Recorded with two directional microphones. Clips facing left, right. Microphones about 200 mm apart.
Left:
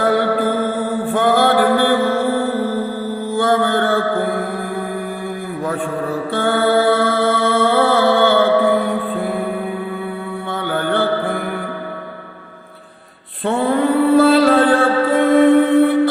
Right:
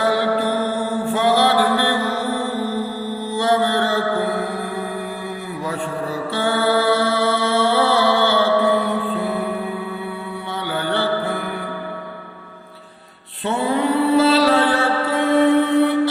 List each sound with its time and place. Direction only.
0.0 s music: 50° left (ahead or behind)
3.3 s mantra: 50° left (ahead or behind)
6.3 s music: 50° left (ahead or behind)
10.5 s music: 50° left (ahead or behind)
13.4 s mantra: 50° left (ahead or behind)